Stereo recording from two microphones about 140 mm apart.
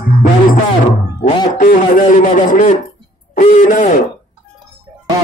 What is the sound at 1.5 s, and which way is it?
A man's voice, 70° left (ahead or behind).